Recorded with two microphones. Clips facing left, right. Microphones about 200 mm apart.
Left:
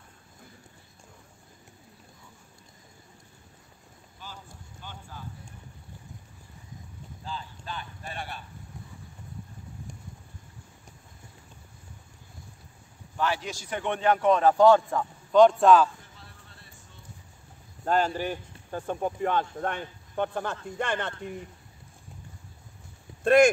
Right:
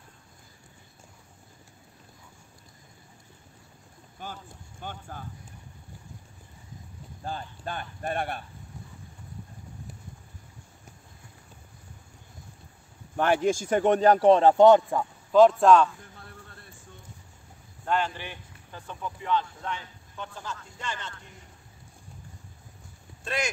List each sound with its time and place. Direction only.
4.2 s run: 55° right (ahead or behind)
4.8 s speech: 50° right (ahead or behind)
7.2 s speech: 55° right (ahead or behind)
13.1 s a man's voice: 55° right (ahead or behind); by 15.0 s 15° right (ahead or behind)
15.3 s a man's voice: centre (ahead or behind)
17.8 s speech: 40° left (ahead or behind); by 21.1 s 60° left (ahead or behind)
23.2 s speech: 55° left (ahead or behind)